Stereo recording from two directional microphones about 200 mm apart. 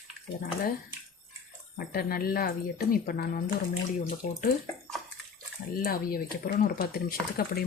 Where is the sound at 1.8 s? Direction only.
50° left (ahead or behind).